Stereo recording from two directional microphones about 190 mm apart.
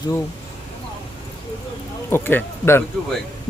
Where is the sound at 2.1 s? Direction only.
10° left (ahead or behind).